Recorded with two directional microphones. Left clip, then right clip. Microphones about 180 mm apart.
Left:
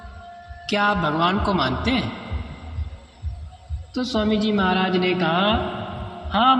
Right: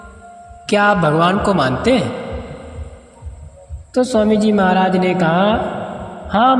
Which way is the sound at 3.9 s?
55° right (ahead or behind).